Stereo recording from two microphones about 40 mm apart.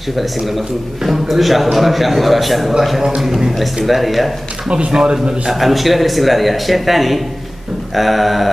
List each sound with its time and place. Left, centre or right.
0.5 s a man's voice: centre
3.8 s a man's voice: centre
4.6 s speech: right
5.5 s a man's voice: centre